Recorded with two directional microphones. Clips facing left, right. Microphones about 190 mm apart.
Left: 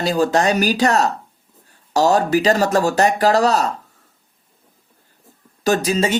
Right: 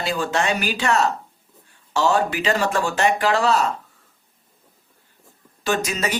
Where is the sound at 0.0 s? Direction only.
40° left (ahead or behind).